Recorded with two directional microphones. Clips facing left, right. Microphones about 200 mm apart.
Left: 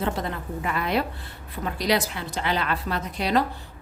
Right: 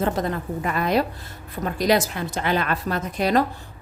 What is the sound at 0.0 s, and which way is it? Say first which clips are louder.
A woman's voice: right 4 dB; 45° right (ahead or behind).